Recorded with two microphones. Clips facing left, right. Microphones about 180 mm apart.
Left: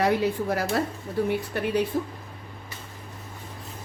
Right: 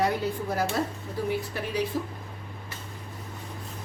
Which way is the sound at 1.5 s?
60° left (ahead or behind).